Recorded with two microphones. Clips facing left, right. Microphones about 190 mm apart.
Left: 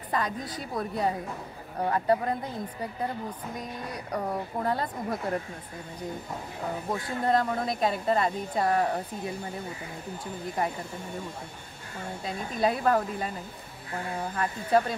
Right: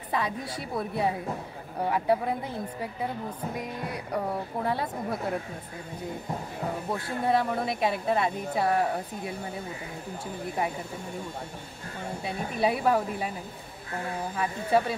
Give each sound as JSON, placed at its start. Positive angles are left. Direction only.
{"t": 0.1, "sound": "a woman's voice", "side_deg": -5}
{"t": 6.9, "sound": "speech", "side_deg": -5}
{"t": 12.3, "sound": "a woman's voice", "side_deg": -10}
{"t": 14.3, "sound": "speech", "side_deg": -5}